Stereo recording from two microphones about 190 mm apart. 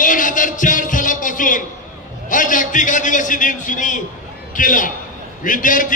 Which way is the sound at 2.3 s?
45° left (ahead or behind).